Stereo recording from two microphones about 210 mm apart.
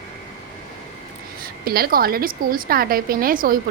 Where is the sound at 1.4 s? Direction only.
45° right (ahead or behind).